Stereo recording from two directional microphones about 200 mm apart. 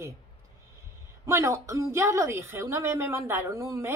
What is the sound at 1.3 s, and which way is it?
Speech, 15° right (ahead or behind).